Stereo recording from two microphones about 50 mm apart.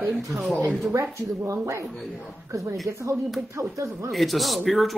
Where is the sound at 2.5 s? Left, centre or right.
Right.